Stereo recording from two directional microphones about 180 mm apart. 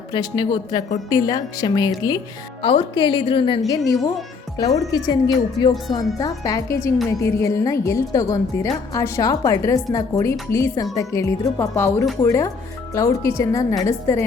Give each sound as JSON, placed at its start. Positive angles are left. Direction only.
{"t": 0.1, "sound": "a woman's voice", "side_deg": 20}